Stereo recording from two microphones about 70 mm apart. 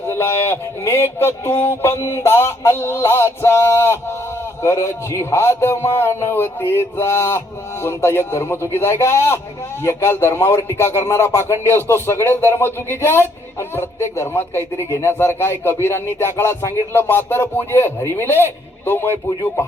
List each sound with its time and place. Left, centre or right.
0.1 s speech: left